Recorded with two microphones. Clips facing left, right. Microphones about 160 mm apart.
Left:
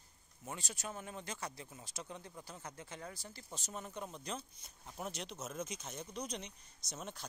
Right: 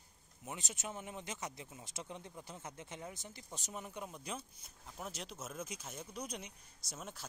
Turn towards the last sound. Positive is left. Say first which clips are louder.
# left 2 dB
turn(degrees=-5)  # may be behind; listen again after turning